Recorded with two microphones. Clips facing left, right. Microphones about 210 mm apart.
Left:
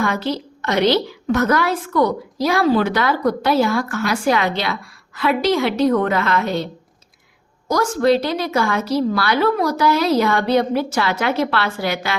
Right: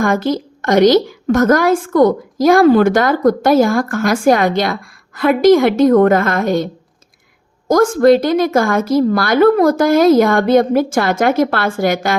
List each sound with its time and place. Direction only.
0.0 s a woman's voice: 50° right (ahead or behind)
7.7 s a woman's voice: 50° right (ahead or behind)